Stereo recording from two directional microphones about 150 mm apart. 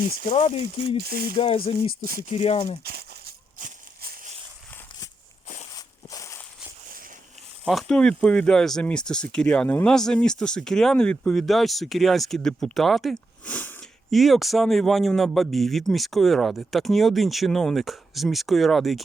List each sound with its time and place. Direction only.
0.3 s speech: 40° left (ahead or behind)
0.9 s speech: 90° right
1.4 s speech: 35° left (ahead or behind)
2.8 s a sound: 90° right
5.7 s walk: 25° left (ahead or behind)
7.7 s speech: centre (ahead or behind)
14.1 s speech: centre (ahead or behind)